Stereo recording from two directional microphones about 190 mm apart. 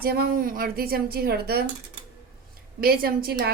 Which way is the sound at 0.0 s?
55° right (ahead or behind).